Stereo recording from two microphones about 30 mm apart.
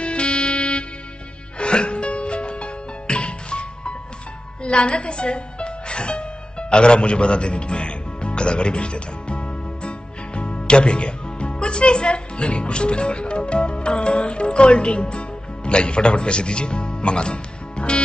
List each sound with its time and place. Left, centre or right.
0.0 s music: left